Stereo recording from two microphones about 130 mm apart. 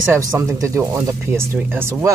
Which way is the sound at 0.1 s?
20° right (ahead or behind).